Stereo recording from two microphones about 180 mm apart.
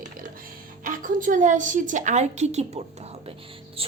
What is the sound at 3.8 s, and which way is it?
Speech, 30° right (ahead or behind).